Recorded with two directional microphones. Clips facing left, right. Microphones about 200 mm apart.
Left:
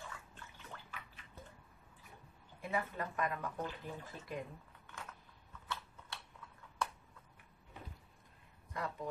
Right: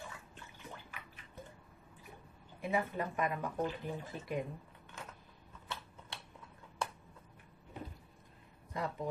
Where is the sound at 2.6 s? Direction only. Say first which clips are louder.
Right 4 dB; 20° right (ahead or behind).